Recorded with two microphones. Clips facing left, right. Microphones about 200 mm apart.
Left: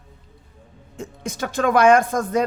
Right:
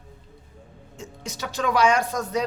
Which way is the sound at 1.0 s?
55° left (ahead or behind).